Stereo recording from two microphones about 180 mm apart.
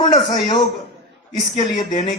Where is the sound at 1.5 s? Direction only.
25° left (ahead or behind).